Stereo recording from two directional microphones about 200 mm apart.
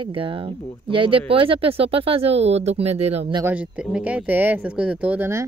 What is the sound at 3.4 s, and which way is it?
Speech, 5° right (ahead or behind).